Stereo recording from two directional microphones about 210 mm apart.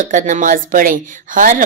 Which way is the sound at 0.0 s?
35° right (ahead or behind).